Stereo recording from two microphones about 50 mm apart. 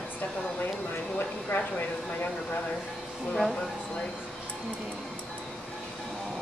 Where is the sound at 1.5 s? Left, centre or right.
Left.